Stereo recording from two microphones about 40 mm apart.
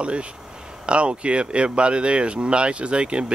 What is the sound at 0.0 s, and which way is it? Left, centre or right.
Speech, right.